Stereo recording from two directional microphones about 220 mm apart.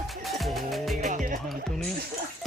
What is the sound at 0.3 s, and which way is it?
Music, centre (ahead or behind).